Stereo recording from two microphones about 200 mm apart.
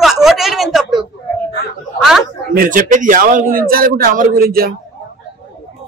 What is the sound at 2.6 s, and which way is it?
A man's voice, 45° right (ahead or behind).